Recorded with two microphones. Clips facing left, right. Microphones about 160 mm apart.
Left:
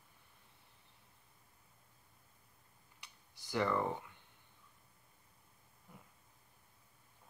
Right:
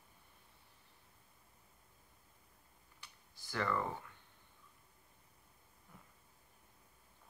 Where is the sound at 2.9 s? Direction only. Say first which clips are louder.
Even; 15° left (ahead or behind).